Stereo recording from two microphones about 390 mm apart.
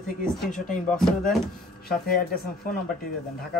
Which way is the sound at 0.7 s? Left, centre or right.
Centre.